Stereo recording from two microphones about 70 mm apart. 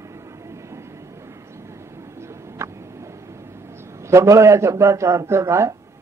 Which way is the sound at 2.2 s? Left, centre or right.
Right.